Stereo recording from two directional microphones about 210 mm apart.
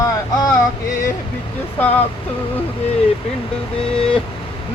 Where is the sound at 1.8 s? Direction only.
5° left (ahead or behind).